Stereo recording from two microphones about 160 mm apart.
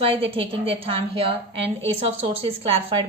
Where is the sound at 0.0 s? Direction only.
35° right (ahead or behind).